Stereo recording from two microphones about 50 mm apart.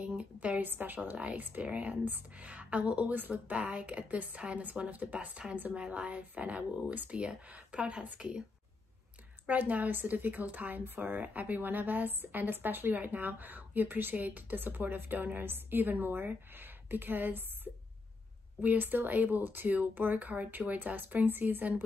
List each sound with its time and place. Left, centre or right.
0.2 s a woman's voice: right
0.6 s speech: right
1.1 s speech: right
9.5 s speech: right
18.6 s speech: right